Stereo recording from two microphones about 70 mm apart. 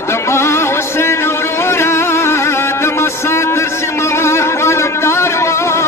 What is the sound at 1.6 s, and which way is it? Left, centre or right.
Music, left.